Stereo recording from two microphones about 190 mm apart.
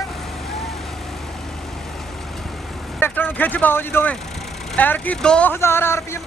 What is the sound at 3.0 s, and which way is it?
Speech, 10° left (ahead or behind).